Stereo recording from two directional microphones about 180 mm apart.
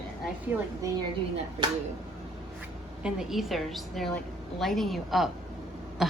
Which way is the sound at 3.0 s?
Centre (ahead or behind).